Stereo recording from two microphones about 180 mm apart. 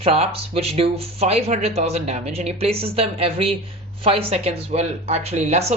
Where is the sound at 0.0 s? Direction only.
35° right (ahead or behind).